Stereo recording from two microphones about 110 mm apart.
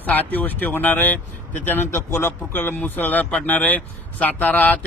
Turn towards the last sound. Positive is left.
turn(degrees=15)  # may be behind; listen again after turning